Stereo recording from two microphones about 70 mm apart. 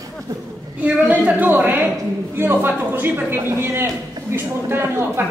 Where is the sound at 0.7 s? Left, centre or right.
Right.